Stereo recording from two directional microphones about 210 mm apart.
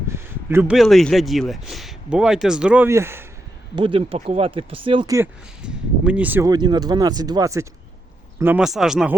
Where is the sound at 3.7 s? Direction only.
25° right (ahead or behind).